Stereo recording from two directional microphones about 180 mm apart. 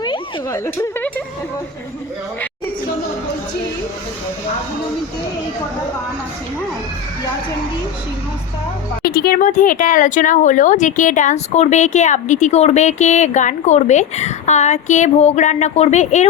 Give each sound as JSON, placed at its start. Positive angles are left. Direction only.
{"t": 0.0, "sound": "a sound", "side_deg": 25}
{"t": 0.6, "sound": "speech", "side_deg": 10}
{"t": 9.0, "sound": "speech", "side_deg": 55}